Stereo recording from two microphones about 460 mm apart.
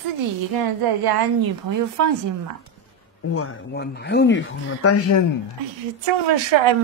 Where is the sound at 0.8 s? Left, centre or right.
Right.